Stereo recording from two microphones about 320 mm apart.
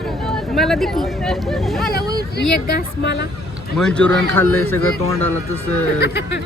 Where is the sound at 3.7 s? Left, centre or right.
Centre.